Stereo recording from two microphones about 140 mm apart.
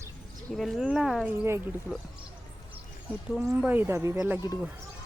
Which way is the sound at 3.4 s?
15° right (ahead or behind).